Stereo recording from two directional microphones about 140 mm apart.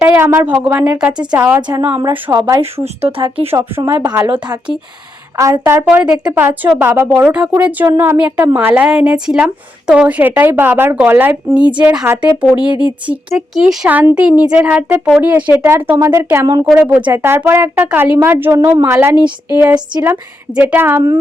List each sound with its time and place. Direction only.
0.0 s a sound: 15° right (ahead or behind)
0.5 s a woman's voice: 15° right (ahead or behind)
2.3 s speech: 25° right (ahead or behind)
2.7 s speech: 45° right (ahead or behind)
3.5 s a woman's voice: 15° right (ahead or behind)
5.4 s a woman's voice: 20° right (ahead or behind)